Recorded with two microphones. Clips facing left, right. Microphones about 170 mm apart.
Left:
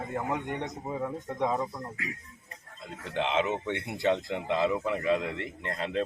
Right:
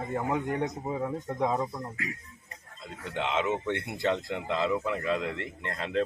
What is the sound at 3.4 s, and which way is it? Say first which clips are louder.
Speech: right 1 dB; 10° left (ahead or behind).